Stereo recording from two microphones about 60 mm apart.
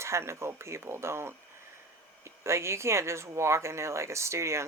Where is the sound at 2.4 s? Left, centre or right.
Right.